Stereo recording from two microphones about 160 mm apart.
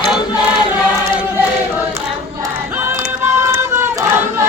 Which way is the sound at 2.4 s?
20° right (ahead or behind).